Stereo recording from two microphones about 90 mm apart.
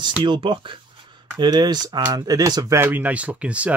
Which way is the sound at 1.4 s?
55° right (ahead or behind).